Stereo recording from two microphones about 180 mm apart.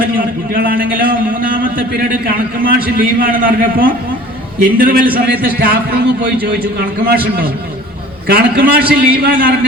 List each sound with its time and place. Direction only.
0.2 s a man's voice: 55° right (ahead or behind)
8.3 s a man's voice: 55° right (ahead or behind)